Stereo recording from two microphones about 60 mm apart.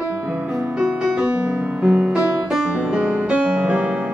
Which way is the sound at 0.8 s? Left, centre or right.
Centre.